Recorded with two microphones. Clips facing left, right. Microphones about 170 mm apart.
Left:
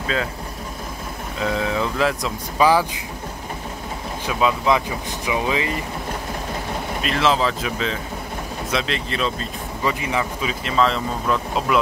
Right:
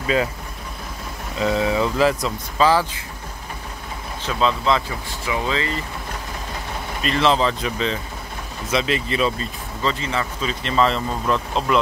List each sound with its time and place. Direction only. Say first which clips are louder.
1.4 s speech: right 3 dB; centre (ahead or behind)
2.6 s speech: left 1 dB; 15° left (ahead or behind)
4.3 s speech: left 1 dB; 10° left (ahead or behind)
7.0 s speech: right 2 dB; centre (ahead or behind)
9.8 s speech: left 1 dB; 15° left (ahead or behind)